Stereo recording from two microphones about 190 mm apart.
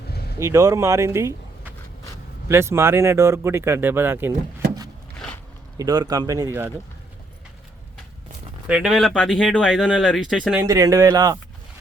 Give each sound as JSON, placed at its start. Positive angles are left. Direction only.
{"t": 0.3, "sound": "speech", "side_deg": -15}
{"t": 5.7, "sound": "a man's voice", "side_deg": -20}
{"t": 8.6, "sound": "speech", "side_deg": -5}
{"t": 10.5, "sound": "speech", "side_deg": -15}